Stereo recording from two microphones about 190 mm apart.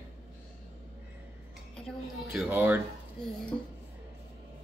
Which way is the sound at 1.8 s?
Centre (ahead or behind).